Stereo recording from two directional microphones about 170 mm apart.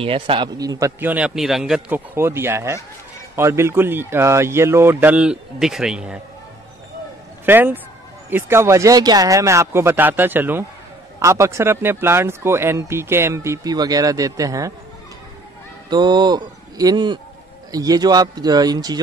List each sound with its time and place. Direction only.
0.0 s speech: 30° right (ahead or behind); by 2.0 s 5° right (ahead or behind)
2.1 s speech: 15° right (ahead or behind)
7.4 s speech: 10° right (ahead or behind)
15.9 s speech: 25° right (ahead or behind)